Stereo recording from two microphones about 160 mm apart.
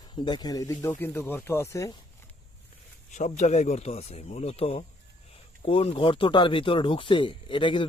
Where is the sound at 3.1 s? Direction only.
45° left (ahead or behind).